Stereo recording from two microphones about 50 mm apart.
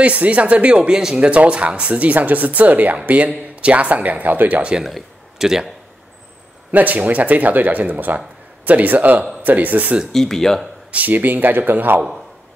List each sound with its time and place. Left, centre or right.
0.0 s speech: right
0.8 s speech: centre
4.8 s speech: centre
6.7 s speech: right
10.1 s speech: centre
10.9 s speech: right